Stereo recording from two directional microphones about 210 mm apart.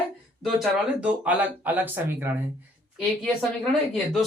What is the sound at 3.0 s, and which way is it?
Speech, centre (ahead or behind).